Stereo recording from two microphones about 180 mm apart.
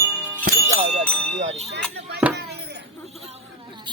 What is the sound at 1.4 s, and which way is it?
Speech, 35° right (ahead or behind).